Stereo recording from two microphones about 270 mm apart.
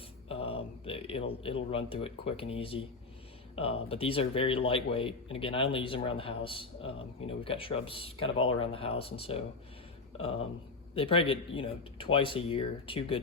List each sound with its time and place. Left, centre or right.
0.3 s speech: left
10.9 s speech: centre